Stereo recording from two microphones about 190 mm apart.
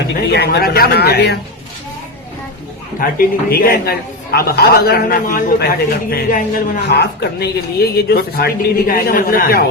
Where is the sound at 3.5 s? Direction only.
50° left (ahead or behind).